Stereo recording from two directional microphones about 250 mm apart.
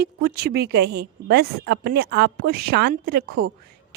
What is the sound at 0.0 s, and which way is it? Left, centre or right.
A woman's voice, right.